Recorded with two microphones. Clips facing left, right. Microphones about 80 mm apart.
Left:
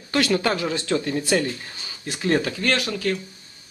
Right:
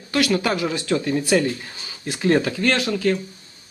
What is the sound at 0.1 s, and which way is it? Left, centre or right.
Speech, centre.